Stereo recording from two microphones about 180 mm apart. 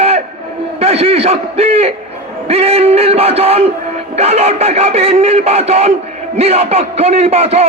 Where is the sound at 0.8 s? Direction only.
35° right (ahead or behind).